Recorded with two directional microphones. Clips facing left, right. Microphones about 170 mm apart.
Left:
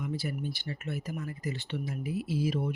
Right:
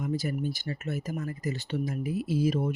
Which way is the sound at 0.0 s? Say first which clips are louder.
Right 4 dB; 45° right (ahead or behind).